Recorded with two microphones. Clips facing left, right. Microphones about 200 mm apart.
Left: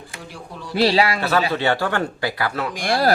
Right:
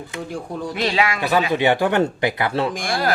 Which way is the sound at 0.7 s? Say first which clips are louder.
Left 4 dB; 35° left (ahead or behind).